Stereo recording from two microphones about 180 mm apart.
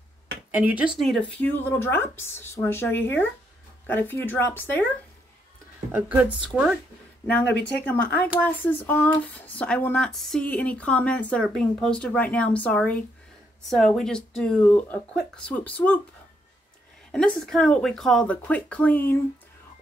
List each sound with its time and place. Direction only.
0.5 s speech: 10° right (ahead or behind); by 4.8 s 10° left (ahead or behind)
5.9 s speech: 10° right (ahead or behind)
7.4 s speech: 70° left (ahead or behind)
7.8 s speech: 10° left (ahead or behind)
17.1 s speech: centre (ahead or behind)